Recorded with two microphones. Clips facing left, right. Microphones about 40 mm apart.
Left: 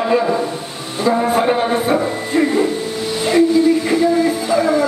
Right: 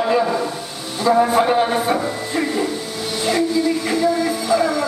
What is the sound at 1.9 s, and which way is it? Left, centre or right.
Music, centre.